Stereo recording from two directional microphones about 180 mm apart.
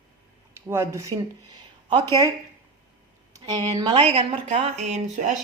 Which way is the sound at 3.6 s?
30° right (ahead or behind).